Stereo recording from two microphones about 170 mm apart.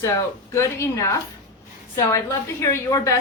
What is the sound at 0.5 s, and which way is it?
A woman's voice, 20° left (ahead or behind).